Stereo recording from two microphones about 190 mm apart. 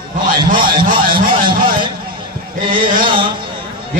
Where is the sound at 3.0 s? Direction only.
25° right (ahead or behind).